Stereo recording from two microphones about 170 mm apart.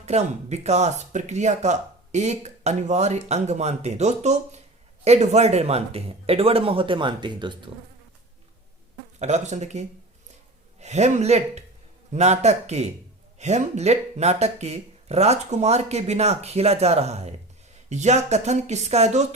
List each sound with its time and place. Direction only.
0.0 s speech: 40° right (ahead or behind)
9.1 s speech: 40° right (ahead or behind)